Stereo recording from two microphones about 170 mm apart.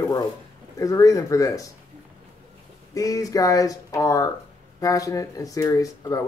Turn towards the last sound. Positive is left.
turn(degrees=20)  # may be behind; listen again after turning